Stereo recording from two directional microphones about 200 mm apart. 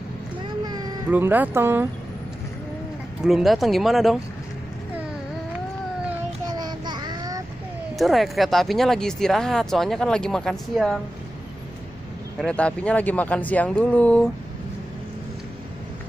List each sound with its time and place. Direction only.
1.1 s speech: 10° right (ahead or behind)
3.2 s speech: 5° right (ahead or behind)
6.5 s child singing: 20° right (ahead or behind)
7.9 s speech: centre (ahead or behind)
12.4 s speech: 5° left (ahead or behind)